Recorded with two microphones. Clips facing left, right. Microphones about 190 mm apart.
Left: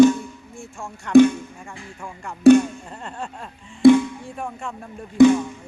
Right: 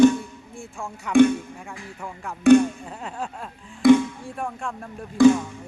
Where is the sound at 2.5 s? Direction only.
35° left (ahead or behind).